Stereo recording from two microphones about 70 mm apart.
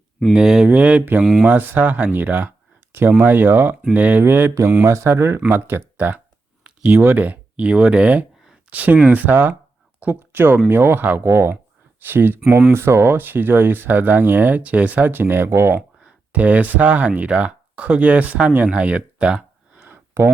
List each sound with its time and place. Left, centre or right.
0.3 s speech: centre
0.7 s speech: centre
1.2 s speech: centre
1.5 s speech: right
6.7 s a sound: centre
7.0 s speech: right
16.0 s speech: centre
18.5 s a sound: centre